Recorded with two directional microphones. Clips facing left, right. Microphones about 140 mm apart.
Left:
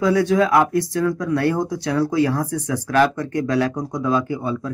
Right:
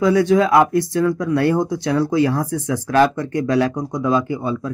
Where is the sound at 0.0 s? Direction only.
20° right (ahead or behind).